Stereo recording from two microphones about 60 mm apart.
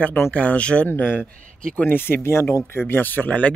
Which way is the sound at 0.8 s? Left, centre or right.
Left.